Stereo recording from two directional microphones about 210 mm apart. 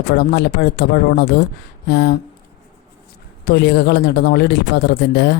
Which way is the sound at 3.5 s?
50° left (ahead or behind).